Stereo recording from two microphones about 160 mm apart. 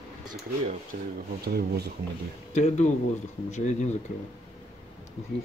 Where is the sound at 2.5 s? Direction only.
45° left (ahead or behind).